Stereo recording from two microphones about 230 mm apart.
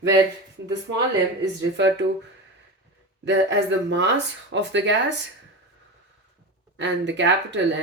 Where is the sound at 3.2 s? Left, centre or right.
Right.